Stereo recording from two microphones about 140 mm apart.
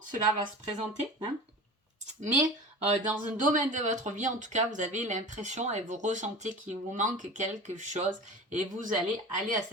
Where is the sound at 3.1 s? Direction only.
60° right (ahead or behind).